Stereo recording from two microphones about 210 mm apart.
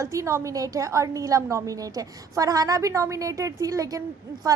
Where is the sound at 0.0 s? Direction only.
15° right (ahead or behind).